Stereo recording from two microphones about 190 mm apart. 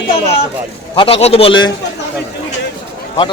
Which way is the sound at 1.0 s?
30° left (ahead or behind).